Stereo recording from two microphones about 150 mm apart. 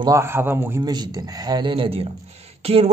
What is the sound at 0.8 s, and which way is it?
Speech, 25° right (ahead or behind).